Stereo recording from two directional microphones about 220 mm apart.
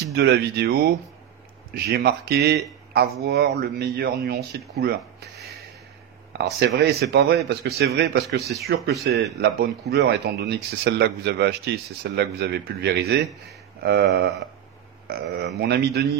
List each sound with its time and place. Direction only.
0.1 s speech: 50° right (ahead or behind)
6.3 s speech: 45° right (ahead or behind)